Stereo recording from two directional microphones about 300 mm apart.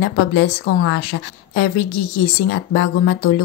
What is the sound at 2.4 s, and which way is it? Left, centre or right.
Speech, left.